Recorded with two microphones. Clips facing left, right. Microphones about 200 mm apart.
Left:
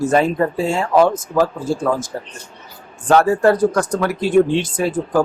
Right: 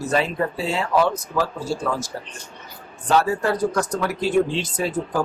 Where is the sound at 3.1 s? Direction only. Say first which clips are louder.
Left 7 dB; 50° left (ahead or behind).